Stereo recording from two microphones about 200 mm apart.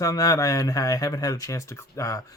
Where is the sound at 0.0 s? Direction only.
15° left (ahead or behind).